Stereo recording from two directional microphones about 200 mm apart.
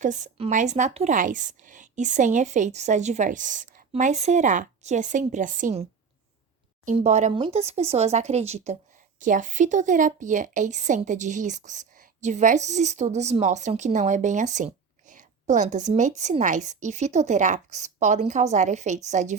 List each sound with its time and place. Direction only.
0.0 s speech: 40° right (ahead or behind)
6.8 s speech: 35° right (ahead or behind)